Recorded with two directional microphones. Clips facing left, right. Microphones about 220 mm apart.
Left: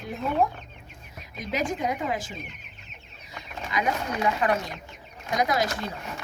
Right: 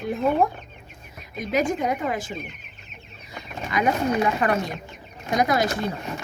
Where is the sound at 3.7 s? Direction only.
55° right (ahead or behind).